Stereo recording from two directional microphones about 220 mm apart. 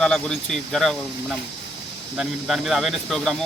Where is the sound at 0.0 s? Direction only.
5° left (ahead or behind).